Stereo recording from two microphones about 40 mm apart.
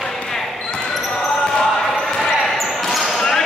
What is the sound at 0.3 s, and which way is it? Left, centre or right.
Basketball bounce, centre.